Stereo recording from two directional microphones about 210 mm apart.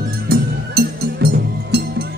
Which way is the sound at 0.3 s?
45° right (ahead or behind).